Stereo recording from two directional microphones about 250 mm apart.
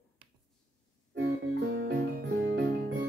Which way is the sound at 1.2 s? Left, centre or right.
Right.